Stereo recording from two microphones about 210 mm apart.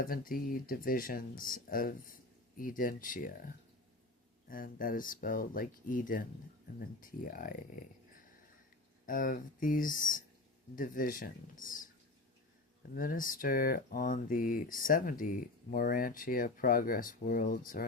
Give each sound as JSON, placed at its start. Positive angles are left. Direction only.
{"t": 0.0, "sound": "speech", "side_deg": 40}
{"t": 9.0, "sound": "speech", "side_deg": 40}
{"t": 12.9, "sound": "speech", "side_deg": 45}